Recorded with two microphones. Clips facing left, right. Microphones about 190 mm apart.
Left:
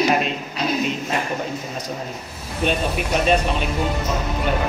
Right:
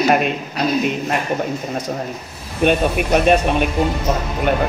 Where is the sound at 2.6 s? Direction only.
55° right (ahead or behind).